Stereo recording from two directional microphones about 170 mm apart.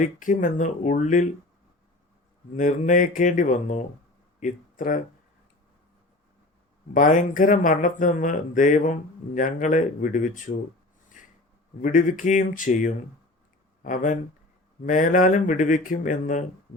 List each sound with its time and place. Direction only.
0.0 s speech: 50° left (ahead or behind)
2.6 s speech: 50° left (ahead or behind)
6.9 s speech: 50° left (ahead or behind)
11.2 s snort: 50° left (ahead or behind)
11.8 s speech: 50° left (ahead or behind)